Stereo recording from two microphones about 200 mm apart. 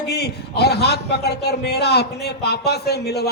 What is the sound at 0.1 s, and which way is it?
A man's voice, 55° left (ahead or behind).